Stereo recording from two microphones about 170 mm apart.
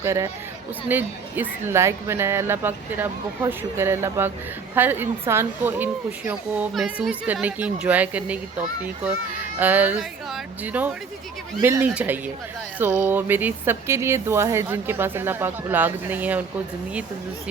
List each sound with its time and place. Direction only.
0.0 s speech: 15° right (ahead or behind)